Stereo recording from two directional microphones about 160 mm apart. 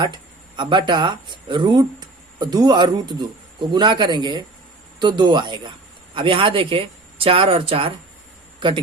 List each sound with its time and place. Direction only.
0.0 s speech: 30° right (ahead or behind)